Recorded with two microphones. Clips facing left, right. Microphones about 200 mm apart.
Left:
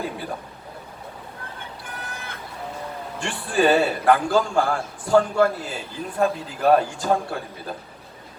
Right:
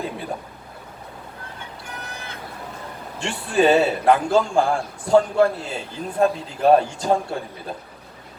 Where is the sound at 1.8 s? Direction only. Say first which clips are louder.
Right 1 dB; 55° left (ahead or behind).